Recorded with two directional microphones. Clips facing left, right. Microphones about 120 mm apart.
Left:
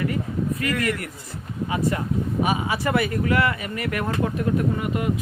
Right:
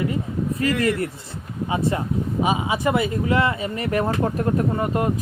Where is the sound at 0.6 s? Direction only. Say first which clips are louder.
Right 4 dB; 30° right (ahead or behind).